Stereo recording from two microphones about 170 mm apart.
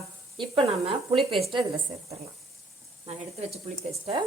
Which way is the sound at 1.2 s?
Centre (ahead or behind).